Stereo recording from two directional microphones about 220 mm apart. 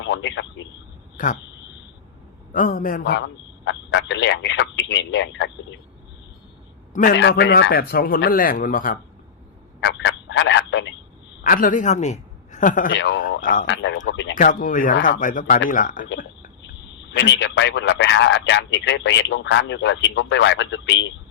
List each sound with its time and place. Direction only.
0.0 s a sound: 55° left (ahead or behind)
1.1 s speech: 35° left (ahead or behind)
2.5 s speech: 40° left (ahead or behind)
3.0 s a man's voice: 55° left (ahead or behind)
6.9 s a man's voice: 40° left (ahead or behind)
7.2 s a man's voice: 50° left (ahead or behind)
9.8 s telephone: 50° left (ahead or behind)
11.4 s a man's voice: 40° left (ahead or behind)
12.9 s a man's voice: 55° left (ahead or behind)
14.3 s speech: 35° left (ahead or behind)
17.2 s a man's voice: 55° left (ahead or behind)